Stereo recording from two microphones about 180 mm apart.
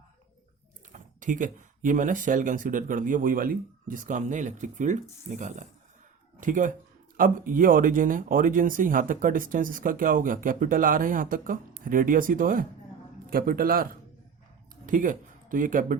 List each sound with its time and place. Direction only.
0.9 s speech: 45° right (ahead or behind)